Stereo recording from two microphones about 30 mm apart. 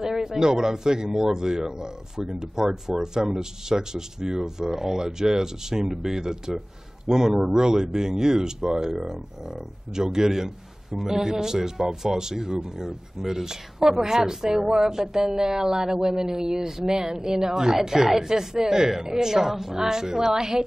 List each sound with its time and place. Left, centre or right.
0.0 s a man's voice: centre
9.9 s a man's voice: centre